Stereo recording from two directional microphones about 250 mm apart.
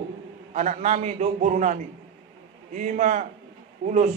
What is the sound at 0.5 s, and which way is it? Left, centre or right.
A man's voice, right.